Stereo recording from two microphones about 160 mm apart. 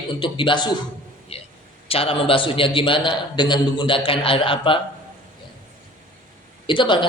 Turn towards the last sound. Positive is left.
turn(degrees=30)  # may be behind; listen again after turning